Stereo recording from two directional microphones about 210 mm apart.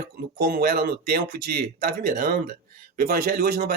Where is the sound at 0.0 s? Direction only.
45° right (ahead or behind).